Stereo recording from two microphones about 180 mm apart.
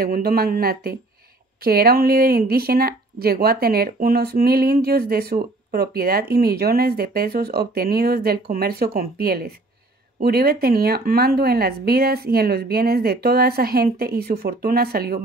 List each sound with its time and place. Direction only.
0.0 s speech: 55° right (ahead or behind)